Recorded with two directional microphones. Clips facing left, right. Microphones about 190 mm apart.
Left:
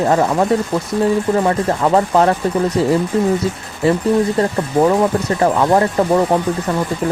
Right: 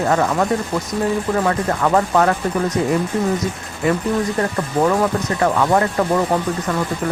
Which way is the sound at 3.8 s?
30° left (ahead or behind).